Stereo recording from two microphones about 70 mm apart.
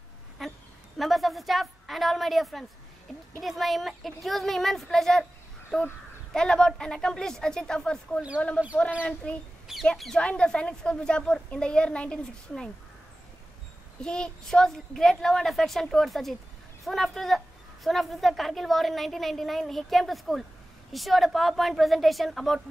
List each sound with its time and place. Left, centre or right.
0.4 s a sound: centre
3.3 s a woman's voice: centre
14.0 s a woman's voice: centre